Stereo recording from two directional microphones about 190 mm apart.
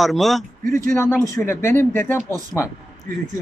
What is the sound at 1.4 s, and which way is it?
Speech, 15° left (ahead or behind).